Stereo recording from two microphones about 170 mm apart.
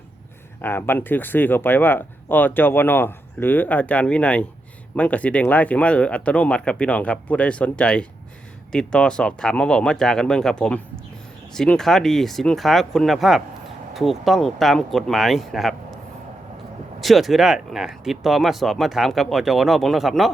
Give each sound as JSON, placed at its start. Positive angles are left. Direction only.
{"t": 0.6, "sound": "speech", "side_deg": 10}
{"t": 17.0, "sound": "speech", "side_deg": 0}